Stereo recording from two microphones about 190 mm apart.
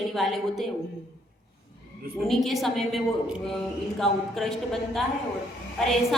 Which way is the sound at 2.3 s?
Centre (ahead or behind).